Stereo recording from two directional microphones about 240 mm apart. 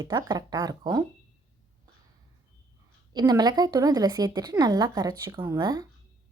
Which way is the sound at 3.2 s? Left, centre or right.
Centre.